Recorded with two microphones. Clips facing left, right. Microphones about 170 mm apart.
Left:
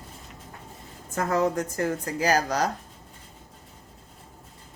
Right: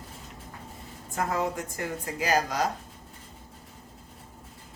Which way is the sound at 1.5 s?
40° left (ahead or behind).